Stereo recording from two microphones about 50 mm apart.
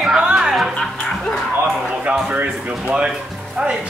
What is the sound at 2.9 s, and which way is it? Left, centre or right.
Speech, right.